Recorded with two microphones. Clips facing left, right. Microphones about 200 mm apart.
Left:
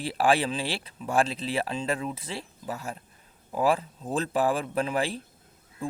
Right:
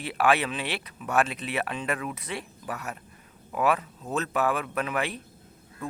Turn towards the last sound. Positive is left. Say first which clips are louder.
# left 3 dB
turn(degrees=30)  # may be behind; listen again after turning